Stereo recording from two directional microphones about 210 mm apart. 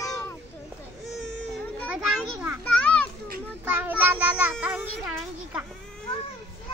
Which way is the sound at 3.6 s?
10° right (ahead or behind).